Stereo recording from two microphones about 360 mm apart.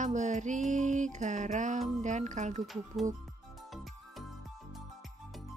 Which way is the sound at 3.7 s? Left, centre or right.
Centre.